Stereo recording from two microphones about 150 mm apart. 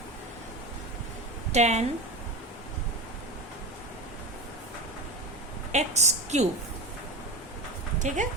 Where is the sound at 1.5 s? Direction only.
50° right (ahead or behind).